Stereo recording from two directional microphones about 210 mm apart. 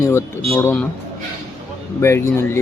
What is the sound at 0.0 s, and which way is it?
Speech, 15° left (ahead or behind).